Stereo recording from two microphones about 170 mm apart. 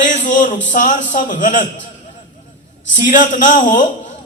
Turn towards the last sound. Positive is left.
turn(degrees=50)  # may be behind; listen again after turning